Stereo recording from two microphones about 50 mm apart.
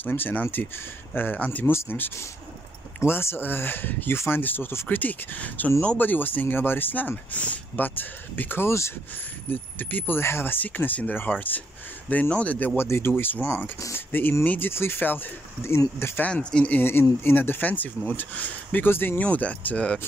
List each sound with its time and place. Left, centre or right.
0.0 s speech: left
1.9 s speech: left
4.8 s speech: left
8.6 s speech: left
9.5 s speech: left
10.2 s speech: left
12.7 s speech: left
14.7 s speech: left
15.6 s speech: left
16.5 s speech: left
17.2 s speech: left
18.9 s speech: left
19.1 s speech: left